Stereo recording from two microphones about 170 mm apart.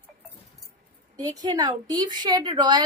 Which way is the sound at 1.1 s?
20° right (ahead or behind).